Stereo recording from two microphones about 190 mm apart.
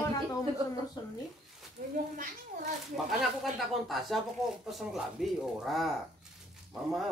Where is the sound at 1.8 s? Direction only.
45° right (ahead or behind).